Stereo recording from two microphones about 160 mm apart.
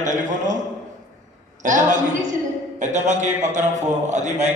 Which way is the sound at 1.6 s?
50° right (ahead or behind).